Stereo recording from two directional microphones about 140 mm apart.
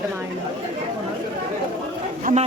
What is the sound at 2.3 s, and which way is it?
Speech, 70° right (ahead or behind).